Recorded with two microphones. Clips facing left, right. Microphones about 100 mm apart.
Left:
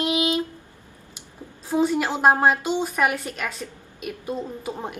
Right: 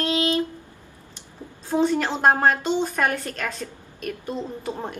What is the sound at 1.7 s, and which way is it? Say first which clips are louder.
A woman's voice: even; 10° left (ahead or behind).